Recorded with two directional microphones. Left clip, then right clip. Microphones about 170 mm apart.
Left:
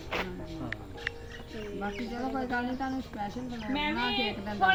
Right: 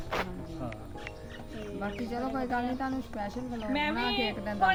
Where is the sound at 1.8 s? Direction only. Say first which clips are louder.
Right 1 dB; 20° right (ahead or behind).